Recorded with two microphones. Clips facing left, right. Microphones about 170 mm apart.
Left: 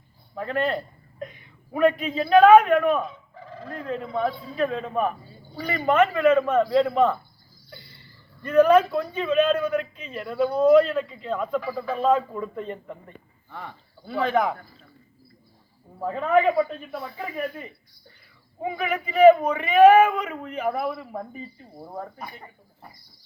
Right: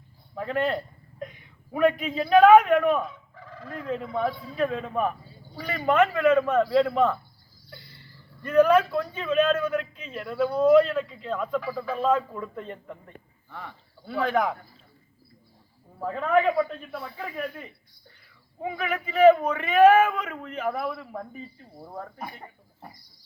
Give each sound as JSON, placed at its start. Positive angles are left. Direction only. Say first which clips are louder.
{"t": 0.3, "sound": "a man's voice", "louder": "left 1 dB", "side_deg": -15}
{"t": 1.8, "sound": "a man's voice", "louder": "left 2 dB", "side_deg": -15}
{"t": 3.1, "sound": "fowl", "louder": "left 3 dB", "side_deg": 30}
{"t": 3.8, "sound": "a man's voice", "louder": "left 1 dB", "side_deg": -15}
{"t": 8.4, "sound": "a man's voice", "louder": "left 2 dB", "side_deg": -5}
{"t": 9.6, "sound": "speech", "louder": "left 2 dB", "side_deg": 10}
{"t": 9.9, "sound": "speech", "louder": "left 2 dB", "side_deg": 0}
{"t": 16.0, "sound": "speech", "louder": "left 2 dB", "side_deg": 5}